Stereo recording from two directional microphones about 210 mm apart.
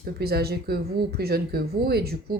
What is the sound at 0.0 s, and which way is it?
Speech, 50° right (ahead or behind).